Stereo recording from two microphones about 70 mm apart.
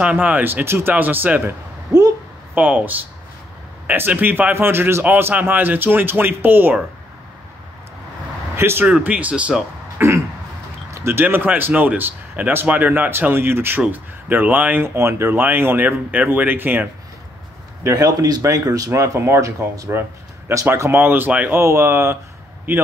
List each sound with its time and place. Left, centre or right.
0.0 s speech: right
1.9 s a sound: right
2.5 s speech: right
8.5 s speech: right
8.8 s speech: centre
10.0 s speech: right
10.9 s a sound: right
11.1 s speech: right
15.0 s speech: right
17.9 s speech: right